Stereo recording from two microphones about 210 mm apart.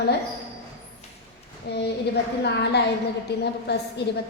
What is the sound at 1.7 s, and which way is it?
A woman's voice, 55° left (ahead or behind).